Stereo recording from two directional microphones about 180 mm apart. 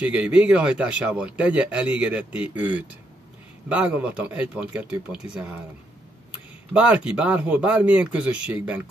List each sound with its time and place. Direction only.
0.0 s a man's voice: 5° right (ahead or behind)
6.7 s speech: 5° right (ahead or behind)